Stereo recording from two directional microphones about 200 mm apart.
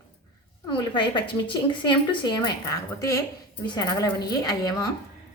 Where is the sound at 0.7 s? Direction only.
25° left (ahead or behind).